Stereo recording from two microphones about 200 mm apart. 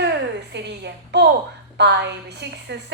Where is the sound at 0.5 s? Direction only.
60° right (ahead or behind).